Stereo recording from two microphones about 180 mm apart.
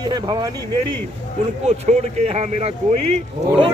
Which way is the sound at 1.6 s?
35° right (ahead or behind).